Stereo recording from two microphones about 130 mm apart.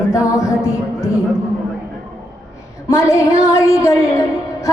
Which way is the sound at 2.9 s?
25° left (ahead or behind).